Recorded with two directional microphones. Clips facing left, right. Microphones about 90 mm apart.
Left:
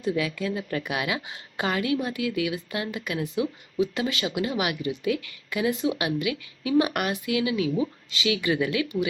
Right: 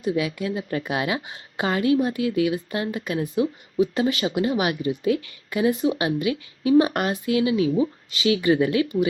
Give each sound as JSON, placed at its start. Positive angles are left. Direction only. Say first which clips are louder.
{"t": 0.0, "sound": "a woman's voice", "louder": "right 2 dB", "side_deg": -25}